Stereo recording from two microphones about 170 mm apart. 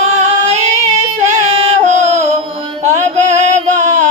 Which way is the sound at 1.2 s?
45° right (ahead or behind).